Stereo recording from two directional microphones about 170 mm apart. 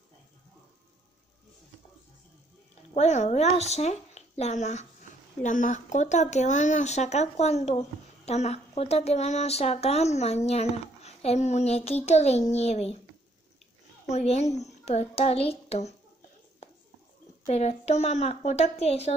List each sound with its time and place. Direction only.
2.9 s speech: 40° left (ahead or behind)
14.0 s speech: 40° left (ahead or behind)
17.5 s speech: 40° left (ahead or behind)